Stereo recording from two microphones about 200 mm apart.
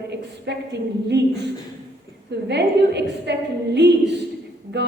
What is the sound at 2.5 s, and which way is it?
A woman's voice, 55° right (ahead or behind).